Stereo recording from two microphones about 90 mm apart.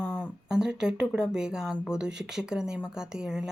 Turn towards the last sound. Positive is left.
turn(degrees=-10)  # may be behind; listen again after turning